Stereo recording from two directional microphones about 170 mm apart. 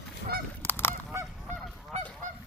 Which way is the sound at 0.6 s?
15° left (ahead or behind).